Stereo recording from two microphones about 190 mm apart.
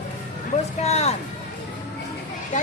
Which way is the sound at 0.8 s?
35° left (ahead or behind).